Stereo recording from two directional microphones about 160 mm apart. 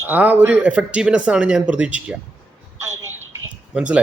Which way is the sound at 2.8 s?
15° right (ahead or behind).